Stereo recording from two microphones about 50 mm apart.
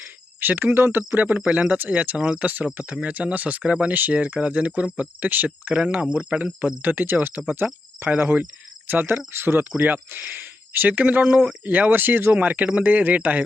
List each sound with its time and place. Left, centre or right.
0.3 s speech: right
1.1 s speech: right
1.4 s speech: right
9.7 s speech: right
10.1 s speech: right